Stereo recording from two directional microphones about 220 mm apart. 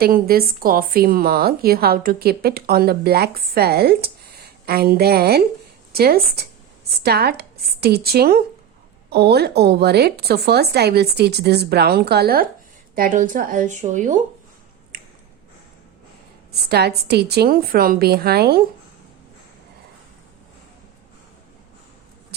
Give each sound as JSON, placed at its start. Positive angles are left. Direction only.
{"t": 0.0, "sound": "a woman's voice", "side_deg": -45}
{"t": 14.9, "sound": "squish", "side_deg": -40}
{"t": 16.5, "sound": "a woman's voice", "side_deg": -45}